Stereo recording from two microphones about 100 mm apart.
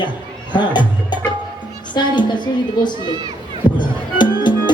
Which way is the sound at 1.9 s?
50° left (ahead or behind).